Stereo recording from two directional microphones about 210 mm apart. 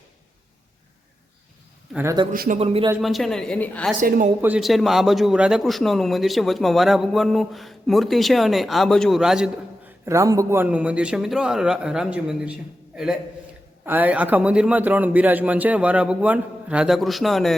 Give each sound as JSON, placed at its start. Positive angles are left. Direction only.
{"t": 1.9, "sound": "a man's voice", "side_deg": -10}
{"t": 2.3, "sound": "speech", "side_deg": -40}
{"t": 2.6, "sound": "speech", "side_deg": -25}
{"t": 3.0, "sound": "a man's voice", "side_deg": 0}
{"t": 4.4, "sound": "a man's voice", "side_deg": -5}
{"t": 10.1, "sound": "a man's voice", "side_deg": -15}
{"t": 13.8, "sound": "a man's voice", "side_deg": -10}